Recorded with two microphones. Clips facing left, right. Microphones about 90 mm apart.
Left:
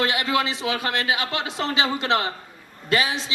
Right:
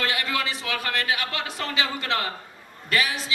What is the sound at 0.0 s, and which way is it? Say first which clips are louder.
Speech: left 4 dB; 20° left (ahead or behind).